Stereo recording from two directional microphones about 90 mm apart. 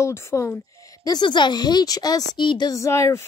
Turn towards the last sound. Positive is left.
turn(degrees=35)  # may be behind; listen again after turning